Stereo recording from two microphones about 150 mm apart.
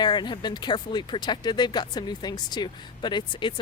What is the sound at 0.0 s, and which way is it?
Speech, 30° left (ahead or behind).